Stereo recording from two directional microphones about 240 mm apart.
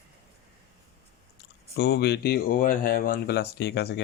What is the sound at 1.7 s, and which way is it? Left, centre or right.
Speech, left.